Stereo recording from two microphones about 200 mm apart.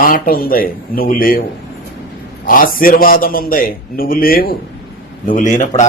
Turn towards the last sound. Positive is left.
turn(degrees=35)  # may be behind; listen again after turning